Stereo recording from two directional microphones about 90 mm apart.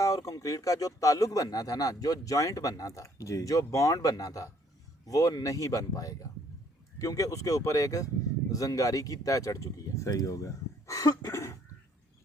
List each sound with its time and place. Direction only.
0.0 s speech: 40° left (ahead or behind)